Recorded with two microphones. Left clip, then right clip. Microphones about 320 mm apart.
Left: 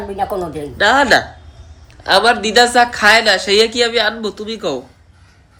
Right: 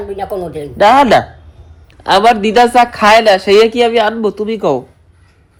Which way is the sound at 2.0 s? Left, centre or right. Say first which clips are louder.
Right 3 dB; centre.